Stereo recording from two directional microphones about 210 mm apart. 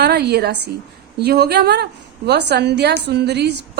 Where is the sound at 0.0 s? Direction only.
50° right (ahead or behind).